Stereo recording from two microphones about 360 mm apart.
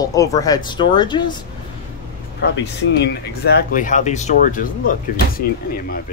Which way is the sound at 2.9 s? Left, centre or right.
Left.